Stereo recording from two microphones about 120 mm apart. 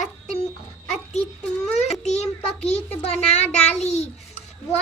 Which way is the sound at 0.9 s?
70° left (ahead or behind).